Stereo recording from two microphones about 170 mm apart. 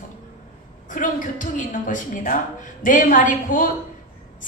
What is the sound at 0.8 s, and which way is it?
A woman's voice, 50° left (ahead or behind).